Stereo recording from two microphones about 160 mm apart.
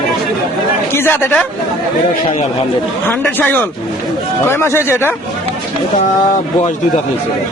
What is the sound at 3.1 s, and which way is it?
A man's voice, 10° left (ahead or behind).